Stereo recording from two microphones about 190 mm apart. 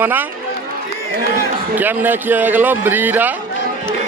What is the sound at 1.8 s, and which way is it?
Speech, 10° right (ahead or behind).